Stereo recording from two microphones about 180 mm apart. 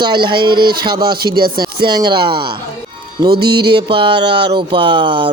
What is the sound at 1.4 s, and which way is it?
Speech, 55° right (ahead or behind).